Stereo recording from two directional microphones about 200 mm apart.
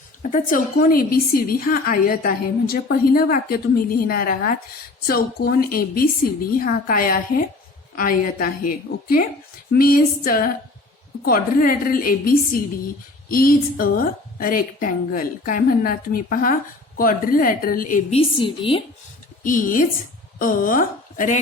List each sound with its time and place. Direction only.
0.2 s a woman's voice: 35° left (ahead or behind)
18.2 s a woman's voice: 25° left (ahead or behind)
19.4 s a woman's voice: 45° left (ahead or behind)